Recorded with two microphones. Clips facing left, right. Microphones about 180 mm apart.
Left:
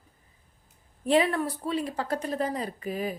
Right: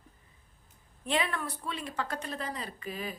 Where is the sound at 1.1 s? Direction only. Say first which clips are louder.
Left 8 dB; 35° left (ahead or behind).